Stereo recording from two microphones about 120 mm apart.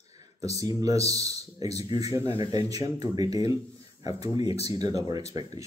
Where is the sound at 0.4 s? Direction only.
30° right (ahead or behind).